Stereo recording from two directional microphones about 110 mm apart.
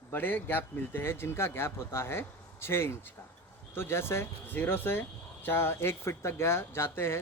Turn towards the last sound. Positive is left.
turn(degrees=20)  # may be behind; listen again after turning